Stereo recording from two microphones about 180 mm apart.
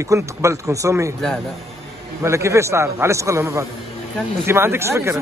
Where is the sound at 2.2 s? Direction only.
15° right (ahead or behind).